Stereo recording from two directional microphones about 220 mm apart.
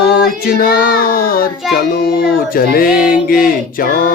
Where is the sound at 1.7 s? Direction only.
40° left (ahead or behind).